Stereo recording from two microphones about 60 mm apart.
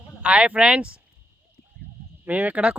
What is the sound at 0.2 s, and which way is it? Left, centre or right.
Speech, right.